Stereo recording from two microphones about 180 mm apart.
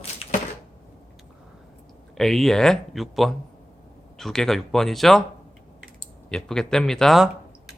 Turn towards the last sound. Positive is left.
turn(degrees=0)  # may be behind; listen again after turning